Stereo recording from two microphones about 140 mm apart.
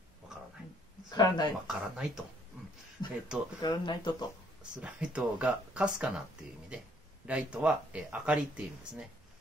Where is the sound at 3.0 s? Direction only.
30° left (ahead or behind).